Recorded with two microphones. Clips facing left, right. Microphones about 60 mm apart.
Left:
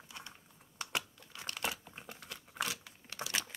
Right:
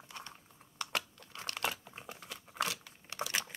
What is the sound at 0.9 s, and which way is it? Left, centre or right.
Crumpling, centre.